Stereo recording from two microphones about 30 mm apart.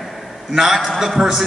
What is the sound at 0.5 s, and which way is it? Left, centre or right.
Speech, centre.